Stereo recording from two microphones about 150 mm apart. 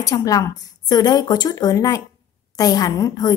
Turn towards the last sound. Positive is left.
turn(degrees=25)  # may be behind; listen again after turning